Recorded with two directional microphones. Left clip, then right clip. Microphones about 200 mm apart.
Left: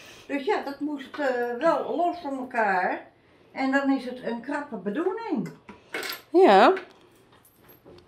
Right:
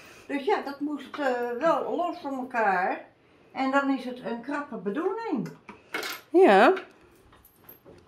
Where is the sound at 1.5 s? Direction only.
10° right (ahead or behind).